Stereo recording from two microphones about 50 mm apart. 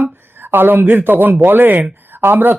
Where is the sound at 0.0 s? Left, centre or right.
Right.